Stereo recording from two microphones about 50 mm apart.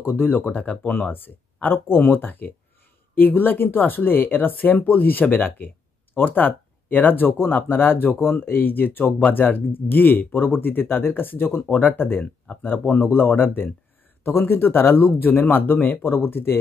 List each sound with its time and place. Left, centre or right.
0.0 s speech: left
11.7 s speech: left